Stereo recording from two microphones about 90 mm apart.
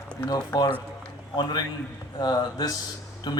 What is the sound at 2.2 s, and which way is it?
Speech, 50° left (ahead or behind).